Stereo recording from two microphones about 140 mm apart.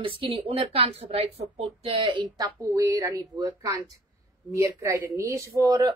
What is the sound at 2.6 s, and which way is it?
Speech, 25° right (ahead or behind).